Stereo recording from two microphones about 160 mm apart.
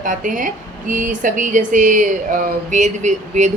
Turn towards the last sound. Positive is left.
turn(degrees=-45)  # may be behind; listen again after turning